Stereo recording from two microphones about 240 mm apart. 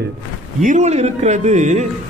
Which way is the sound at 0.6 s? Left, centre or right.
Right.